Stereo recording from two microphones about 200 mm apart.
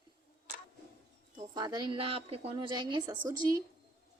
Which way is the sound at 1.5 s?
20° right (ahead or behind).